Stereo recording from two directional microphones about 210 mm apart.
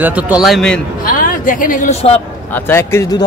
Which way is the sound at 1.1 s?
40° left (ahead or behind).